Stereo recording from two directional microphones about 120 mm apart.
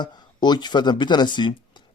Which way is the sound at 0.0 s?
35° left (ahead or behind).